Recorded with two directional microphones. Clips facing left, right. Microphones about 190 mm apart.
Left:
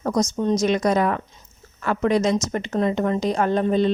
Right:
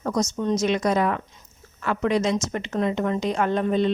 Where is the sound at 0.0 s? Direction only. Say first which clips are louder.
Left 3 dB; 35° left (ahead or behind).